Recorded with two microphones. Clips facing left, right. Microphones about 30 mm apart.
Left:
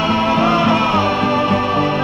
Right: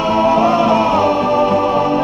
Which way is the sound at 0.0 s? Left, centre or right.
Left.